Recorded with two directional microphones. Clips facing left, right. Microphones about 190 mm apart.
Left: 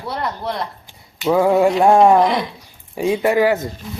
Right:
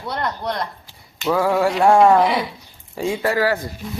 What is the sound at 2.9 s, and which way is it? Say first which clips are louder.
Speech: left 4 dB; 20° left (ahead or behind).